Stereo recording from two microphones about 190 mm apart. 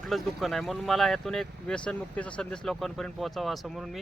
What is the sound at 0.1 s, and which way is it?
Speech, centre (ahead or behind).